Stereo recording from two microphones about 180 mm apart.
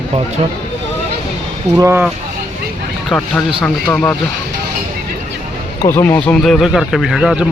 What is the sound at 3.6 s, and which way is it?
Speech, 5° left (ahead or behind).